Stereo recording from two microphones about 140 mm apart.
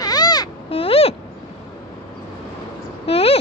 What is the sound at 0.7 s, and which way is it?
Owl, 40° left (ahead or behind).